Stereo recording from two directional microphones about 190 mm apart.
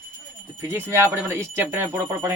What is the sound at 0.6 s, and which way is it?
Speech, 15° right (ahead or behind).